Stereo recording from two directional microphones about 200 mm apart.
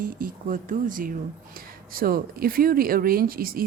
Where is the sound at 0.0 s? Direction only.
40° right (ahead or behind).